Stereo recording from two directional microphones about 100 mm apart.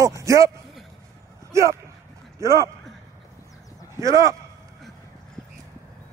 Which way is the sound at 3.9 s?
30° right (ahead or behind).